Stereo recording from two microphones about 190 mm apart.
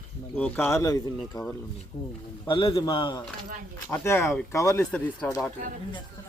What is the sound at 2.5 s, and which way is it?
Speech, 25° left (ahead or behind).